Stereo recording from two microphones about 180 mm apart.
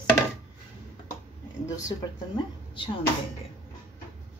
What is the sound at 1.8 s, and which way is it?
Speech, 25° left (ahead or behind).